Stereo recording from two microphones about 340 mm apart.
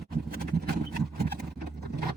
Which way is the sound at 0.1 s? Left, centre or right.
Right.